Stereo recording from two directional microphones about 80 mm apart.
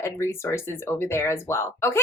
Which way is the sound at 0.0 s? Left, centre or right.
Left.